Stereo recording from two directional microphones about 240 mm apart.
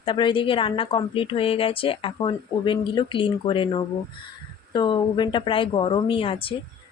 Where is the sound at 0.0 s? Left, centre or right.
Left.